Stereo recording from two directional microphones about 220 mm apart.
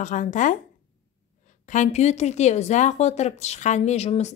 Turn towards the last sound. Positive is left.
turn(degrees=30)  # may be behind; listen again after turning